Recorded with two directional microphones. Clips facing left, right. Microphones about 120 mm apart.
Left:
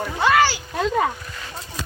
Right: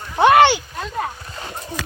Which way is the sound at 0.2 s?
65° right (ahead or behind).